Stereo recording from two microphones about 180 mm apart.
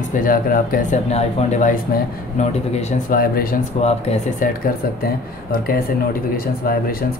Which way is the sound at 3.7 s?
35° left (ahead or behind).